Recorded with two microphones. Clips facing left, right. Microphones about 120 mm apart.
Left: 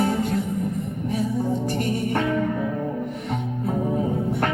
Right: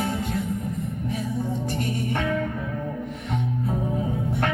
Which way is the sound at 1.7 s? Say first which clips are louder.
Left 3 dB; 45° left (ahead or behind).